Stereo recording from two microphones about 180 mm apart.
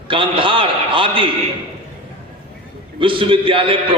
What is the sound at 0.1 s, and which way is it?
A man's voice, 30° right (ahead or behind).